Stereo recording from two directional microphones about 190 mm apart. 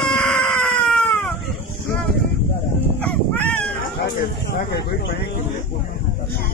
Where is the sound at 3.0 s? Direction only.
5° left (ahead or behind).